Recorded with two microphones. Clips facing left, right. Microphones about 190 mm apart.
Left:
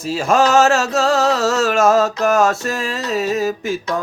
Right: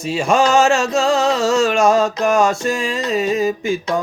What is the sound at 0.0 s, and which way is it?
Music, centre (ahead or behind).